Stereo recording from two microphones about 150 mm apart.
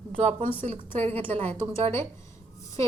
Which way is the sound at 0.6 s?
45° right (ahead or behind).